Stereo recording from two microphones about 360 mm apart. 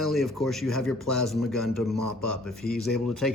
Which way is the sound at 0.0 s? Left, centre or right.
Centre.